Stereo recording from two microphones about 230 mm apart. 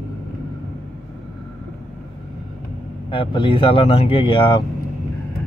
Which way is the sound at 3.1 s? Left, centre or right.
Left.